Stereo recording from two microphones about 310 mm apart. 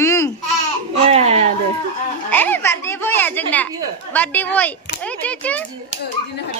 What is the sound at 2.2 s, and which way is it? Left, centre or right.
Speech, centre.